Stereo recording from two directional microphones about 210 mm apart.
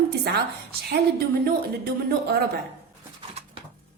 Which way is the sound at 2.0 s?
50° right (ahead or behind).